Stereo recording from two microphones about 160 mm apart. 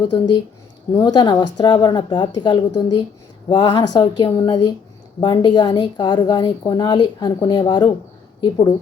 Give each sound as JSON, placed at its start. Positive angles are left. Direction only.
{"t": 0.0, "sound": "a woman's voice", "side_deg": 30}